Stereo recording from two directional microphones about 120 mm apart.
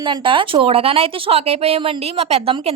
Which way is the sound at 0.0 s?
45° right (ahead or behind).